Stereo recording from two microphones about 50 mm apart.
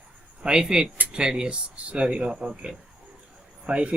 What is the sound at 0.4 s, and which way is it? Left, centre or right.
Speech, centre.